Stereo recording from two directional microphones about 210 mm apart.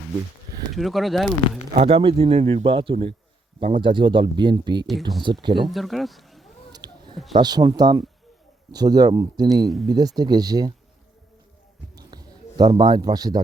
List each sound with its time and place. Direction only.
0.8 s speech: centre (ahead or behind)
1.7 s speech: 30° right (ahead or behind)
5.6 s speech: centre (ahead or behind)
6.7 s a sound: 20° right (ahead or behind)
7.3 s speech: 20° right (ahead or behind)
11.9 s a sound: 20° right (ahead or behind)